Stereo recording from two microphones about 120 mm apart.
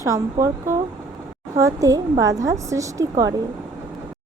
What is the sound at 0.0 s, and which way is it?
A woman's voice, 30° right (ahead or behind).